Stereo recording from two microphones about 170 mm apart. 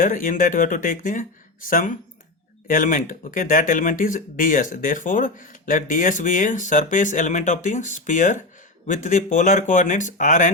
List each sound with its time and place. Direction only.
0.0 s speech: 50° left (ahead or behind)